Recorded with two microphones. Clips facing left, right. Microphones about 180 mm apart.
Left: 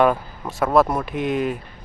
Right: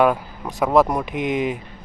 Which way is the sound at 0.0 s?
10° right (ahead or behind).